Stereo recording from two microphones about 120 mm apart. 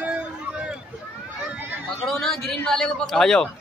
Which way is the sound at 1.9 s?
5° left (ahead or behind).